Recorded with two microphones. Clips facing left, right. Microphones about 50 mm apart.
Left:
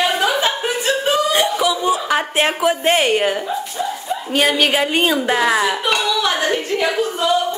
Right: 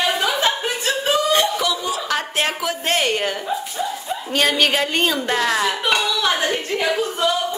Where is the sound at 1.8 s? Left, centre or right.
Left.